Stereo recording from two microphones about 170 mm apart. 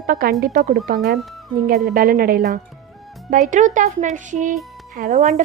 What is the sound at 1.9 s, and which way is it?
Speech, 55° right (ahead or behind).